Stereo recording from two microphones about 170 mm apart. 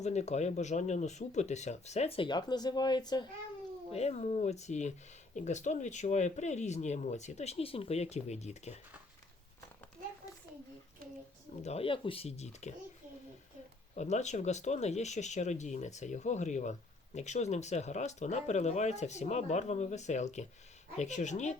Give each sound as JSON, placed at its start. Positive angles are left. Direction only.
{"t": 0.0, "sound": "speech", "side_deg": 40}
{"t": 3.9, "sound": "speech", "side_deg": 40}
{"t": 11.6, "sound": "speech", "side_deg": 35}
{"t": 13.9, "sound": "speech", "side_deg": 45}